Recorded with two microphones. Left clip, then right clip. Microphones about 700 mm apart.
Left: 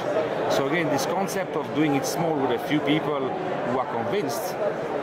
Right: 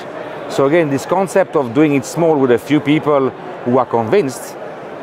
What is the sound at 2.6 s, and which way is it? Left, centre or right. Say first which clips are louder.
A man's voice: right 9 dB; right.